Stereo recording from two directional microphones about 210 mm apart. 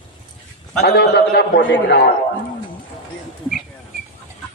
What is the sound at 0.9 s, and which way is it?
A man's voice, 50° left (ahead or behind).